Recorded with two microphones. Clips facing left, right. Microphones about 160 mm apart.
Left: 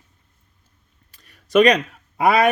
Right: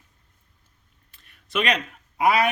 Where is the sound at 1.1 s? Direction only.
40° left (ahead or behind).